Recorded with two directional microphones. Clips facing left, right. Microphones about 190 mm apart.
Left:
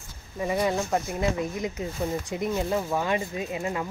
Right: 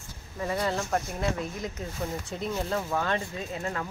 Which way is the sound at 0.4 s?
15° left (ahead or behind).